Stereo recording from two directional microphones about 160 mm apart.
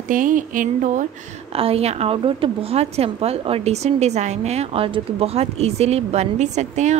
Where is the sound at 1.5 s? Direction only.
35° right (ahead or behind).